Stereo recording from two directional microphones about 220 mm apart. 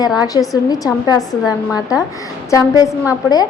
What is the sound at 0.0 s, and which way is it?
A woman's voice, 15° left (ahead or behind).